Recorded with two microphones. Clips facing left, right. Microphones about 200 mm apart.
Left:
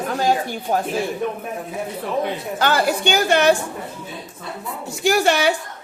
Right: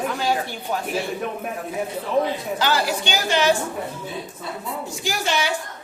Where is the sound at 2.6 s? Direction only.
55° left (ahead or behind).